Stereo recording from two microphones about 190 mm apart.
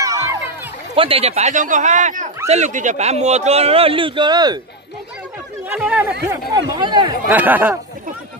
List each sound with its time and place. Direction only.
0.0 s a sound: 15° right (ahead or behind)
0.9 s a man's voice: 30° right (ahead or behind)
5.7 s speech: 5° right (ahead or behind)
6.2 s speech: 15° right (ahead or behind)
7.2 s speech: 10° right (ahead or behind)